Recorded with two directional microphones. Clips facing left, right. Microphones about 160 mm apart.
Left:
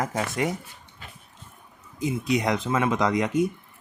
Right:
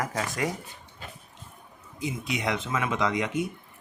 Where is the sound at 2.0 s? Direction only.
40° left (ahead or behind).